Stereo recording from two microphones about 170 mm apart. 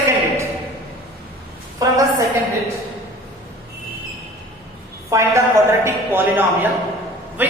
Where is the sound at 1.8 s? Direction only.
20° right (ahead or behind).